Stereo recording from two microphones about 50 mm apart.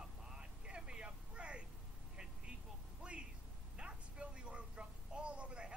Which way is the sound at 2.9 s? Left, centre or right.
Right.